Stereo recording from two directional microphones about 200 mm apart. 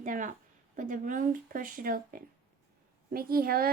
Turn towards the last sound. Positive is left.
turn(degrees=-50)  # may be behind; listen again after turning